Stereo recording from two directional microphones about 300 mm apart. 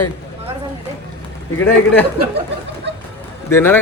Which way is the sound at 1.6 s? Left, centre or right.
Centre.